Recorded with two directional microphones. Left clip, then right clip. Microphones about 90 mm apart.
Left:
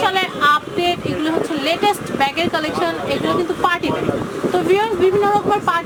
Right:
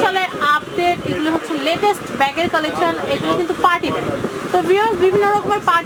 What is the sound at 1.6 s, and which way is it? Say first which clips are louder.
Speech: right 2 dB; 55° left (ahead or behind).